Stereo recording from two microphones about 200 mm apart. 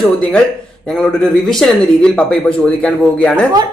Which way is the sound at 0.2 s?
5° left (ahead or behind).